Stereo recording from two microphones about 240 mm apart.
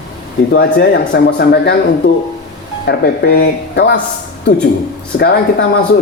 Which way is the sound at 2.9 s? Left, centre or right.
Left.